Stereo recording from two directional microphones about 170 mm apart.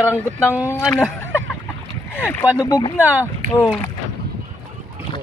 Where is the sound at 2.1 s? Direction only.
10° left (ahead or behind).